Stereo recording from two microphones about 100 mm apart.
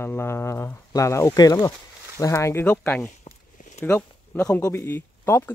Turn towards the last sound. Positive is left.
turn(degrees=20)  # may be behind; listen again after turning